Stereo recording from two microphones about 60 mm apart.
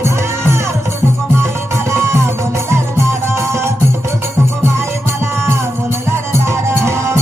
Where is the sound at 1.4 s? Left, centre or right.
Right.